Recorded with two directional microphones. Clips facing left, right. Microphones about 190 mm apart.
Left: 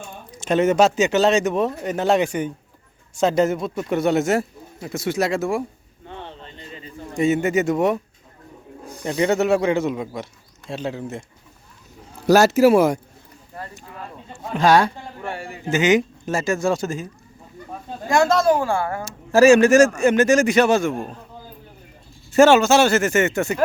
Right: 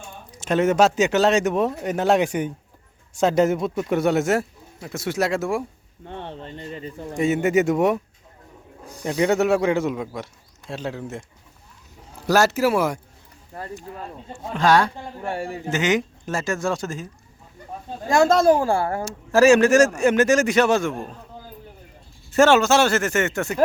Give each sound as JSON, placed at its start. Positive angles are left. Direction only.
{"t": 0.4, "sound": "speech", "side_deg": -5}
{"t": 6.2, "sound": "a sound", "side_deg": -55}
{"t": 7.2, "sound": "speech", "side_deg": -5}
{"t": 9.0, "sound": "speech", "side_deg": -10}
{"t": 12.2, "sound": "speech", "side_deg": 15}
{"t": 14.5, "sound": "speech", "side_deg": 10}
{"t": 15.2, "sound": "speech", "side_deg": -40}
{"t": 15.7, "sound": "speech", "side_deg": 5}
{"t": 18.1, "sound": "speech", "side_deg": -30}
{"t": 19.0, "sound": "speech", "side_deg": 0}
{"t": 22.4, "sound": "speech", "side_deg": 0}